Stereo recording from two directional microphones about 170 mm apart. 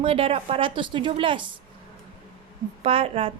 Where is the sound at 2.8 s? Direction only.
35° right (ahead or behind).